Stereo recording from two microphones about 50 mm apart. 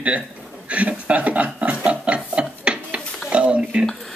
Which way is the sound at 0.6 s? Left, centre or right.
Right.